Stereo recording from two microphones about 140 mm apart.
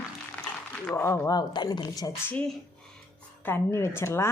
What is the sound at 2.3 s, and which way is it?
Speech, 5° left (ahead or behind).